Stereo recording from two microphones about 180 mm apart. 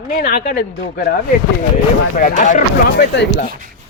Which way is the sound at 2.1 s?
45° left (ahead or behind).